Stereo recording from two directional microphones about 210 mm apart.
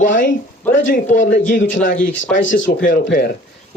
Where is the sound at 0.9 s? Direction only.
35° left (ahead or behind).